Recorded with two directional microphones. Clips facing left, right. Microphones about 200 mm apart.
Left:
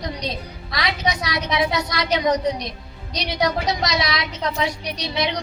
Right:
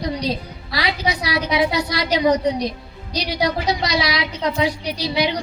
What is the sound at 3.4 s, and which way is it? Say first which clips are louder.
A woman's voice: even; 30° right (ahead or behind).